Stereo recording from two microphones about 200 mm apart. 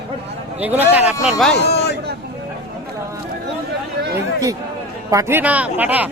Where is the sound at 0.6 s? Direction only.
10° right (ahead or behind).